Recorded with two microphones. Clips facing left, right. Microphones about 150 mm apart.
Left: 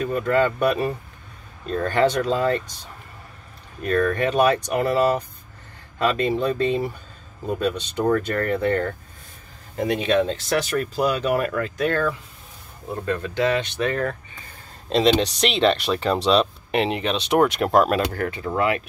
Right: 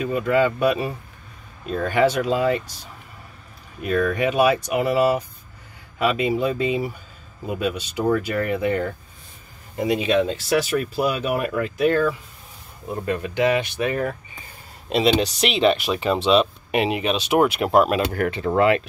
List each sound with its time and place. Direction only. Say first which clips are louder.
0.0 s speech: right 1 dB; 10° right (ahead or behind)
18.1 s speech: right 4 dB; 20° right (ahead or behind)